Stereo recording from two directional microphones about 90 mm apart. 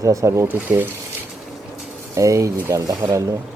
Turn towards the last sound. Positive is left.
turn(degrees=-35)  # may be behind; listen again after turning